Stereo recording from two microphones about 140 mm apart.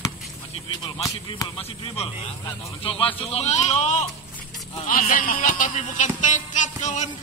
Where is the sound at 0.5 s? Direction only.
35° left (ahead or behind); by 4.0 s 55° left (ahead or behind).